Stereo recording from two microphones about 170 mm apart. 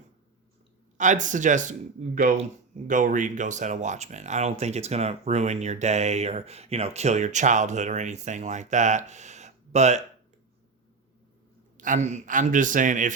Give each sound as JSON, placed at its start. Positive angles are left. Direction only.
{"t": 0.9, "sound": "speech", "side_deg": -45}
{"t": 11.8, "sound": "speech", "side_deg": -45}